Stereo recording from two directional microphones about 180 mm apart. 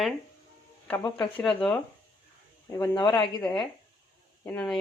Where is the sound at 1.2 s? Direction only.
5° left (ahead or behind).